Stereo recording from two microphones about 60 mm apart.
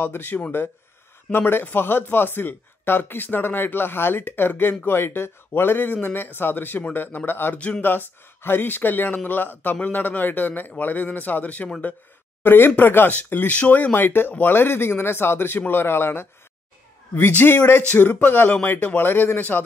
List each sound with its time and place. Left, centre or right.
0.0 s speech: left
7.5 s a man's voice: left
7.9 s a man's voice: left
12.4 s a man's voice: left